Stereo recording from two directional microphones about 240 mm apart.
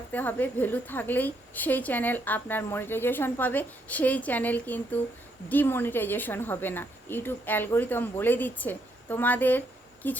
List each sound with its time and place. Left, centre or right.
0.1 s a woman's voice: centre